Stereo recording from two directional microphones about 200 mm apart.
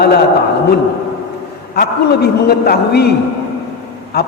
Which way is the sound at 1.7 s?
55° left (ahead or behind).